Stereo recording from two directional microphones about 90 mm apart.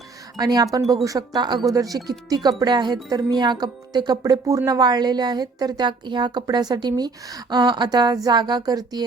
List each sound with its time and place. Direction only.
0.3 s speech: 45° right (ahead or behind)
1.6 s speech: 40° right (ahead or behind)